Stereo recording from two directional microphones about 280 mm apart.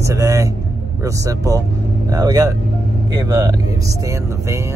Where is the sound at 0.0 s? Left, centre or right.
Centre.